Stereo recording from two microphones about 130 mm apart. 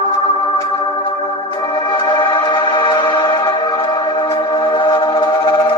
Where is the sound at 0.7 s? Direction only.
40° left (ahead or behind).